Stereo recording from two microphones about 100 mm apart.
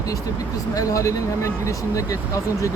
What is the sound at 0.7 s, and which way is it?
Speech, 35° left (ahead or behind).